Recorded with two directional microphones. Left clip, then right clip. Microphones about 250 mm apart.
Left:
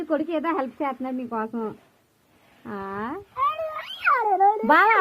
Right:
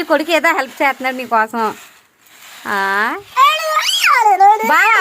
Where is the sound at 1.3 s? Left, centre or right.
Right.